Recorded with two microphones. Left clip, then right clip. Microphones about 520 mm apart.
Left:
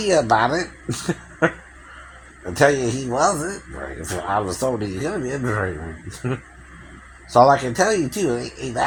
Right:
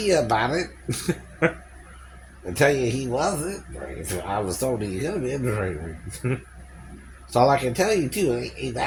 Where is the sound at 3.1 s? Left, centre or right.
Right.